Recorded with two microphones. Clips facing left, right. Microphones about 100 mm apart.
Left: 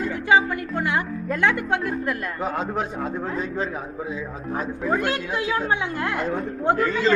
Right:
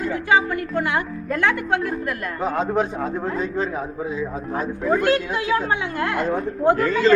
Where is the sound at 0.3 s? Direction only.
20° left (ahead or behind).